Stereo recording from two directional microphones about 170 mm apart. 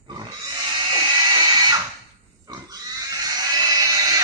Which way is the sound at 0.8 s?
25° right (ahead or behind).